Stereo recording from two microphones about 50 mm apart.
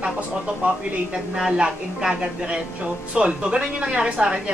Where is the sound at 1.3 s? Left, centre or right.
Centre.